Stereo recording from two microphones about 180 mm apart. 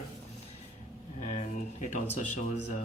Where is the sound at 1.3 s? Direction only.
45° left (ahead or behind).